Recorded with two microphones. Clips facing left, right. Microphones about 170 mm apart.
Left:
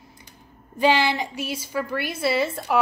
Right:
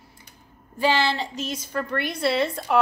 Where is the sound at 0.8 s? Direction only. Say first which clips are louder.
Left 2 dB; 15° left (ahead or behind).